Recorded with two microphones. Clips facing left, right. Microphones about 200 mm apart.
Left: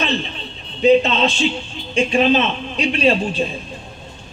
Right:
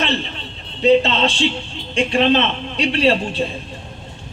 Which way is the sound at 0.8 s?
20° left (ahead or behind).